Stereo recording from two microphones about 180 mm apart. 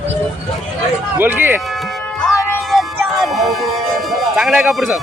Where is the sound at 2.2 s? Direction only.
Centre (ahead or behind).